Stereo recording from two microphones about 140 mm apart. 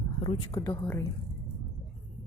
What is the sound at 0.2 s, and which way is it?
Speech, 30° left (ahead or behind).